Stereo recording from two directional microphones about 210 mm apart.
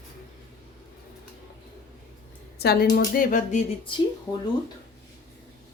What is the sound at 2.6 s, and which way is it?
Speech, 50° left (ahead or behind).